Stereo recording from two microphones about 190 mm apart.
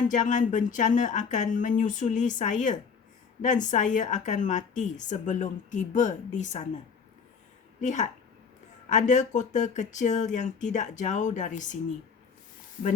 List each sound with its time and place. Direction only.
0.1 s a woman's voice: 40° left (ahead or behind)
7.8 s a woman's voice: 40° left (ahead or behind)